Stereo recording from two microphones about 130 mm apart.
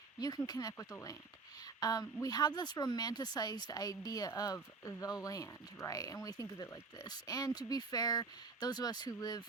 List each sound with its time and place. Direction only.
0.2 s a woman's voice: 30° left (ahead or behind)